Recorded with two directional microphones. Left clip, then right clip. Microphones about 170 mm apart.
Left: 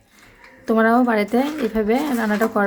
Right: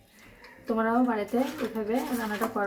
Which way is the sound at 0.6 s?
65° left (ahead or behind).